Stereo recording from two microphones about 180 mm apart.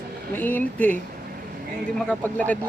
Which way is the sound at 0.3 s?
10° left (ahead or behind).